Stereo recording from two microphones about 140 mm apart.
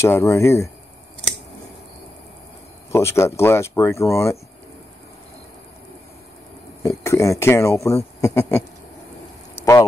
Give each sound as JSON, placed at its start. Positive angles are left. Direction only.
{"t": 0.0, "sound": "speech", "side_deg": 20}
{"t": 2.9, "sound": "speech", "side_deg": 20}
{"t": 7.0, "sound": "speech", "side_deg": 20}
{"t": 9.6, "sound": "a sound", "side_deg": 20}